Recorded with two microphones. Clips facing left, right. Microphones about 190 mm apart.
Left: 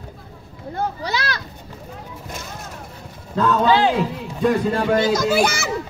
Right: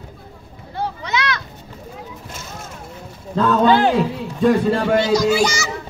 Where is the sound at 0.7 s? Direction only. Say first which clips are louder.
Right 1 dB; 35° left (ahead or behind).